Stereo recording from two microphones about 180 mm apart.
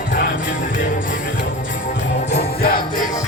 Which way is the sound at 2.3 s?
60° left (ahead or behind).